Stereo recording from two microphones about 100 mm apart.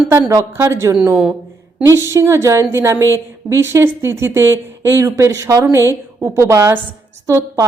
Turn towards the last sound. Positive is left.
turn(degrees=-30)  # may be behind; listen again after turning